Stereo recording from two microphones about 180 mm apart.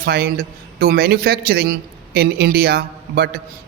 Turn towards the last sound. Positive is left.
turn(degrees=-60)  # may be behind; listen again after turning